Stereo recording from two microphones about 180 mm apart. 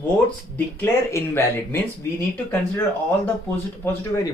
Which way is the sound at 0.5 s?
15° left (ahead or behind).